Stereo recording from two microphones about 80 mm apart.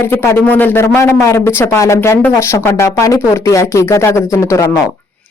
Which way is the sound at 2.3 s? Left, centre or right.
Left.